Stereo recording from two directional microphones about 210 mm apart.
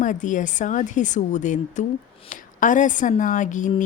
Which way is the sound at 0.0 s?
40° left (ahead or behind).